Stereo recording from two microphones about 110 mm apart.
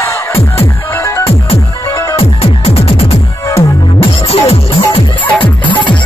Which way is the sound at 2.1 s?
60° left (ahead or behind).